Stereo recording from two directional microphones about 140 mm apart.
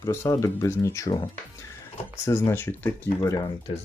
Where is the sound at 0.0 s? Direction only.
20° left (ahead or behind).